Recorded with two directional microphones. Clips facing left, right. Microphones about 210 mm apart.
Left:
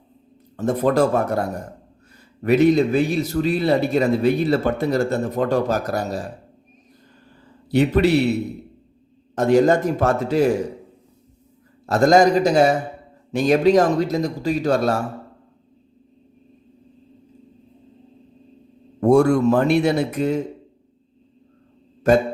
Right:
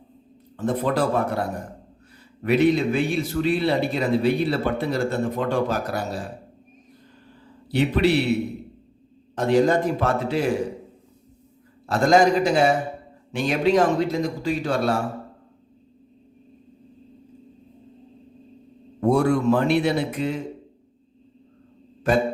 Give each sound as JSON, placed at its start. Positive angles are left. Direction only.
{"t": 0.5, "sound": "a man's voice", "side_deg": 45}
{"t": 2.4, "sound": "speech", "side_deg": 45}
{"t": 7.7, "sound": "a man's voice", "side_deg": 45}
{"t": 9.3, "sound": "a man's voice", "side_deg": 45}
{"t": 11.9, "sound": "speech", "side_deg": 40}
{"t": 18.9, "sound": "a man's voice", "side_deg": 45}
{"t": 22.1, "sound": "a man's voice", "side_deg": 45}